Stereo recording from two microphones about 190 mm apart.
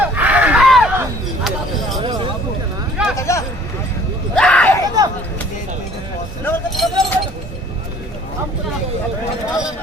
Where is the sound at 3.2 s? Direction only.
15° left (ahead or behind).